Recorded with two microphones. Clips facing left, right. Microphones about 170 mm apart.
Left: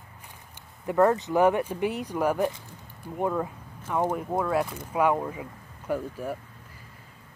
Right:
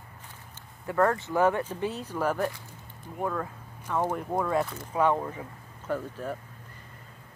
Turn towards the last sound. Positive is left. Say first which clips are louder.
# left 2 dB
turn(degrees=10)  # may be behind; listen again after turning